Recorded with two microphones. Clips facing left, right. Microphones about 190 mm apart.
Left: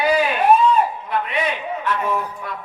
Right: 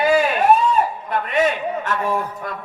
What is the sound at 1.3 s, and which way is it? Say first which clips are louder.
Speech: right 4 dB; 45° right (ahead or behind).